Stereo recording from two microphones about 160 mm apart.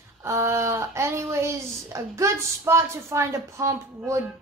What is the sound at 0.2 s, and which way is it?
A woman's voice, 15° right (ahead or behind).